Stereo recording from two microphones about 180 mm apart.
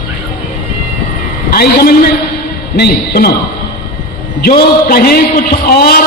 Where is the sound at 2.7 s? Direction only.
65° left (ahead or behind).